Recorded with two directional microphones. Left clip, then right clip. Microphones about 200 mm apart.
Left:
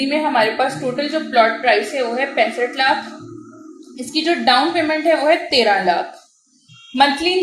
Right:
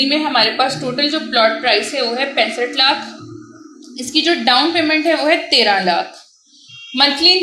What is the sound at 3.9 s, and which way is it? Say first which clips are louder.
A woman's voice: right 3 dB; 40° right (ahead or behind).